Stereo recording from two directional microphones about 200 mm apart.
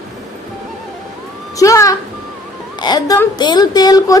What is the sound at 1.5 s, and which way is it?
A woman's voice, 15° left (ahead or behind).